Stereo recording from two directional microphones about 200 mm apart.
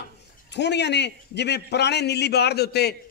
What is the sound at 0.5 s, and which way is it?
A man's voice, 60° left (ahead or behind).